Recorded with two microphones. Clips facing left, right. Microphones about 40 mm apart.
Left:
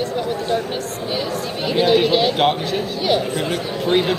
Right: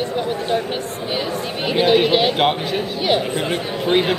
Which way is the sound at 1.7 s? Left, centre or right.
Centre.